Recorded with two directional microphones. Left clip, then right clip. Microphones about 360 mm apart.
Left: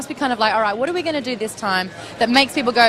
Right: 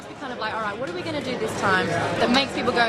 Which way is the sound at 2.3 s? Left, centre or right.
Left.